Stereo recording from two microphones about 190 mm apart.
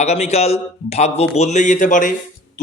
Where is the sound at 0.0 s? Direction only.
35° left (ahead or behind).